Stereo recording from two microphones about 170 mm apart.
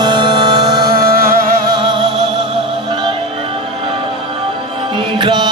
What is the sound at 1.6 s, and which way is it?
Music, 25° right (ahead or behind).